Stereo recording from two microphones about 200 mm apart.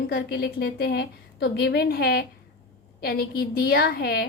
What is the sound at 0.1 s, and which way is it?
A woman's voice, 55° left (ahead or behind).